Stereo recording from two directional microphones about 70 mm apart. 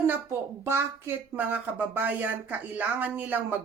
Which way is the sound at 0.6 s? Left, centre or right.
Right.